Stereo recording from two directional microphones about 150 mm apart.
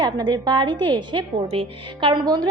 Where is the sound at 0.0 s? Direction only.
25° right (ahead or behind).